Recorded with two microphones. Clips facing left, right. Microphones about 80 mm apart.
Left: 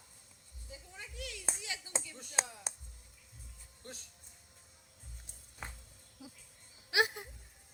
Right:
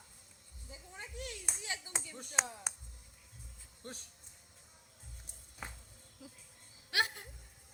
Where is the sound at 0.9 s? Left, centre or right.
Right.